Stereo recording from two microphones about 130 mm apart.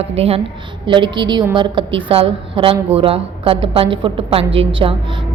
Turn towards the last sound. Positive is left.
turn(degrees=-40)  # may be behind; listen again after turning